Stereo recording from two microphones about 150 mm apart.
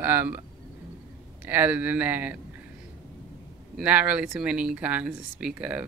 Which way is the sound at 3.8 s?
10° right (ahead or behind).